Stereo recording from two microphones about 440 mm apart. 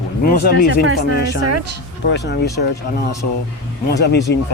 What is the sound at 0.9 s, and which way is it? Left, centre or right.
Speech, left.